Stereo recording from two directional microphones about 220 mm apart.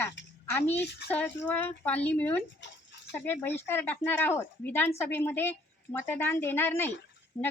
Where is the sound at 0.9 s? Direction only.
50° left (ahead or behind).